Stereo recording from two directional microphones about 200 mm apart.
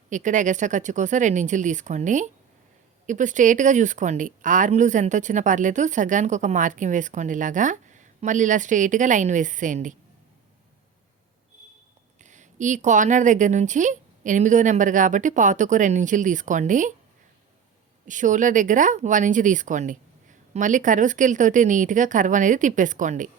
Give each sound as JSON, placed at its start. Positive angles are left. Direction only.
{"t": 0.1, "sound": "speech", "side_deg": -40}
{"t": 12.2, "sound": "speech", "side_deg": -35}
{"t": 18.0, "sound": "speech", "side_deg": -40}